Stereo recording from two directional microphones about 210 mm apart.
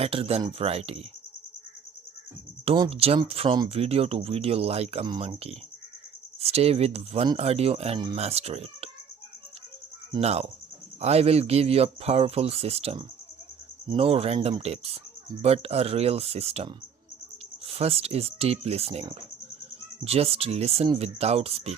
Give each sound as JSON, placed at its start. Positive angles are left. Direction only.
{"t": 0.0, "sound": "speech", "side_deg": -30}
{"t": 2.6, "sound": "speech", "side_deg": -25}
{"t": 10.1, "sound": "speech", "side_deg": -30}